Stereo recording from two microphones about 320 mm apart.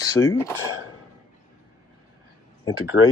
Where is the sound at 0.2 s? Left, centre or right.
Centre.